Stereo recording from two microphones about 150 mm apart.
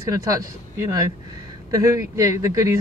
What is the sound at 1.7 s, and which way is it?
Speech, 20° right (ahead or behind).